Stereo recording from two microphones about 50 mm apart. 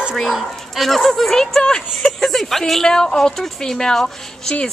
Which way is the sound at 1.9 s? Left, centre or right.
Centre.